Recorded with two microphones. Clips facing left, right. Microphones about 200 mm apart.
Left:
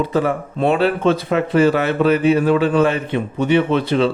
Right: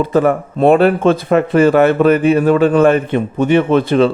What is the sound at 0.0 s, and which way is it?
Speech, 50° right (ahead or behind).